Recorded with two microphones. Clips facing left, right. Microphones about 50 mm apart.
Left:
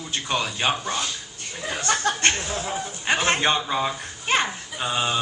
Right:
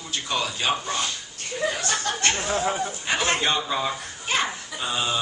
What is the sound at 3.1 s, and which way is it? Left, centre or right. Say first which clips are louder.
Speech: left 3 dB; left.